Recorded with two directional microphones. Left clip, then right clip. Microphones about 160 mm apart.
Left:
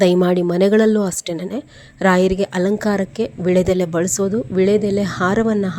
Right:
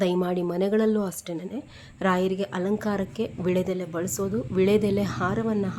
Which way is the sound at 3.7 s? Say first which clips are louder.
Left 11 dB; 40° left (ahead or behind).